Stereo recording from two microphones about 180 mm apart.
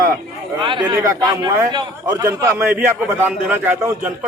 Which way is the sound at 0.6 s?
25° right (ahead or behind).